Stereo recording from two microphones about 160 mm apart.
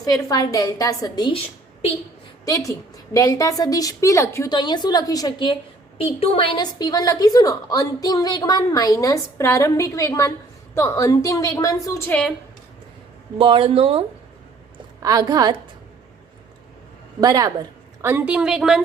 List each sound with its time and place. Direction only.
0.0 s a woman's voice: 25° left (ahead or behind)
2.4 s a woman's voice: 20° left (ahead or behind)
13.4 s speech: 30° right (ahead or behind)
15.0 s a woman's voice: 25° right (ahead or behind)
17.2 s a woman's voice: 20° right (ahead or behind); by 18.8 s 5° right (ahead or behind)